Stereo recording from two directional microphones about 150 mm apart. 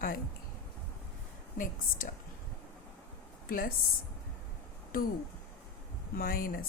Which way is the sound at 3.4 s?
70° left (ahead or behind).